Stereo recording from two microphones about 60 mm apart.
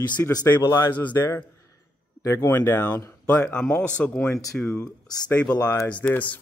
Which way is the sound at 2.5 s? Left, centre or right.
Left.